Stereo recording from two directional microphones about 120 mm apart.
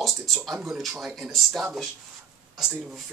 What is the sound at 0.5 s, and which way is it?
Speech, centre (ahead or behind).